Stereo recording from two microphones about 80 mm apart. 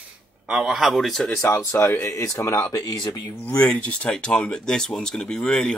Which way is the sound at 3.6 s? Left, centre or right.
Centre.